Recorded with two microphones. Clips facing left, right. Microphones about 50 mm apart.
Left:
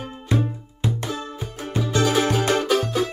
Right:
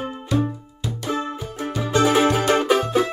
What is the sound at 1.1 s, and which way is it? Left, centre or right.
Music, right.